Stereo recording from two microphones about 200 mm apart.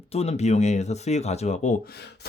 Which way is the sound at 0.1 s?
30° left (ahead or behind).